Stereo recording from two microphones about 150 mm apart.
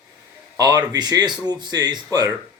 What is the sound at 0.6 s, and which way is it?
Speech, 25° right (ahead or behind).